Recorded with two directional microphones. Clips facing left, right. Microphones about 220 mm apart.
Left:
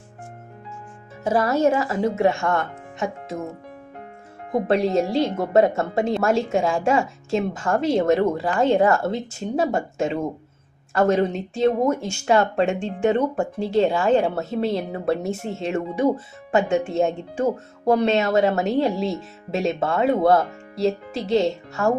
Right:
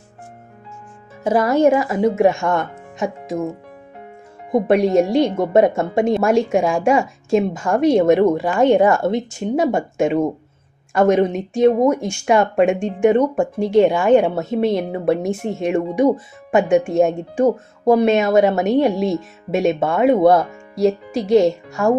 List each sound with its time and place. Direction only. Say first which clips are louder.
1.2 s speech: right 4 dB; 20° right (ahead or behind)
4.5 s speech: right 5 dB; 15° right (ahead or behind)